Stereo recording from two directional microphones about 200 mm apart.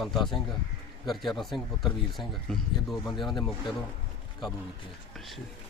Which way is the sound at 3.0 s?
20° left (ahead or behind).